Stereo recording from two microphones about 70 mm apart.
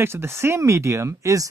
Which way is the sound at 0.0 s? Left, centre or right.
Right.